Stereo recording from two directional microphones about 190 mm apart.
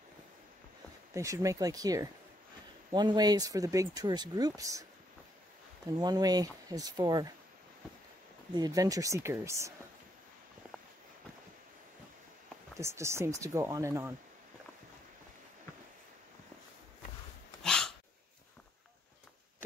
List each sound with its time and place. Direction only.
1.1 s speech: 15° right (ahead or behind)
5.9 s speech: 20° right (ahead or behind)
8.5 s speech: 20° right (ahead or behind)
12.7 s speech: 15° right (ahead or behind)
17.6 s a sound: 5° left (ahead or behind)